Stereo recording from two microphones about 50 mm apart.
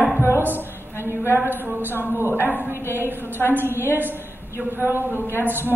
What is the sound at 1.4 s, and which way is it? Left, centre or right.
Speech, right.